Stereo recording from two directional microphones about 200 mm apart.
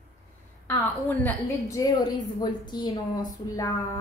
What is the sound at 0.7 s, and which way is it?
A woman's voice, 10° left (ahead or behind).